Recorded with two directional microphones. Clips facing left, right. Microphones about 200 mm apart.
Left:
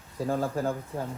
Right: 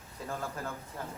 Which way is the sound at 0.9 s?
25° left (ahead or behind).